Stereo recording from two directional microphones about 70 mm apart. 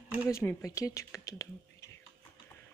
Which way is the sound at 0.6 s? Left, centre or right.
Left.